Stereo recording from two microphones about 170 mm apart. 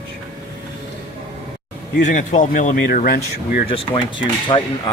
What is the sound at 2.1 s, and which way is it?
Speech, 50° left (ahead or behind).